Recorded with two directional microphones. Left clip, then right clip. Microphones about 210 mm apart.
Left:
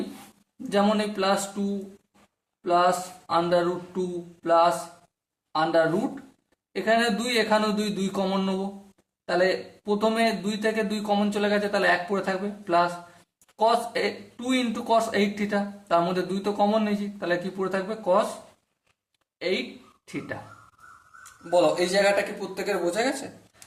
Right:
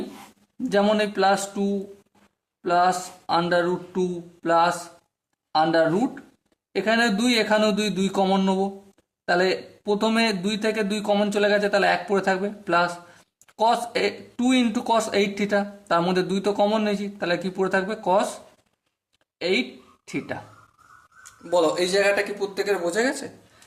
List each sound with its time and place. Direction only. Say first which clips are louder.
0.7 s speech: right 3 dB; 45° right (ahead or behind)
4.4 s a sound: even; 40° right (ahead or behind)
5.5 s speech: right 3 dB; 45° right (ahead or behind)
20.1 s speech: right 4 dB; 40° right (ahead or behind)
21.5 s speech: right 1 dB; 25° right (ahead or behind)